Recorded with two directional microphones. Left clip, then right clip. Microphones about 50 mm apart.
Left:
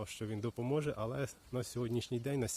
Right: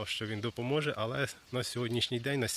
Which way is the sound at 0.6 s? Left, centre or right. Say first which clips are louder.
Right 4 dB; centre.